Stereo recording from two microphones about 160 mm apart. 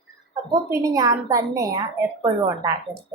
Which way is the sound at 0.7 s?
20° right (ahead or behind).